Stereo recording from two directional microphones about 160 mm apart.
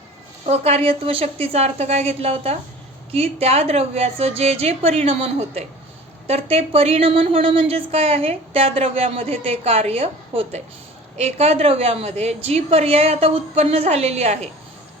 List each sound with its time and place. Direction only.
0.4 s a woman's voice: 40° right (ahead or behind)